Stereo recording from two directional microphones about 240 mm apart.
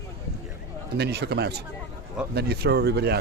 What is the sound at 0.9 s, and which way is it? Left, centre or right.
Speech, right.